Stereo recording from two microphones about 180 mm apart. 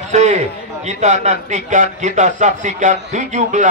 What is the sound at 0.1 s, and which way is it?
A man's voice, 40° right (ahead or behind).